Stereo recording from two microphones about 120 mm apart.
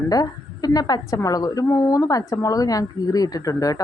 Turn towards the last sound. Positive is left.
turn(degrees=30)  # may be behind; listen again after turning